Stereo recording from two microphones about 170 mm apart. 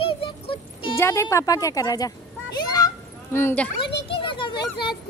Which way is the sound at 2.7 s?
20° left (ahead or behind).